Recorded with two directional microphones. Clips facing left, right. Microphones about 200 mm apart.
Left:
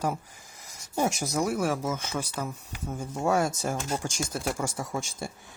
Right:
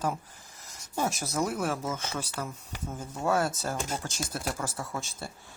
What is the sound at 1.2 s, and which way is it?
Speech, 15° left (ahead or behind).